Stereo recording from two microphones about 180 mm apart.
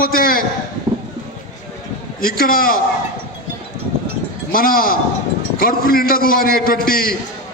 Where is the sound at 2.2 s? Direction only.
55° left (ahead or behind).